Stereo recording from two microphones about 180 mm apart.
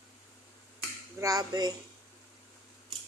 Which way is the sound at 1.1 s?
20° right (ahead or behind).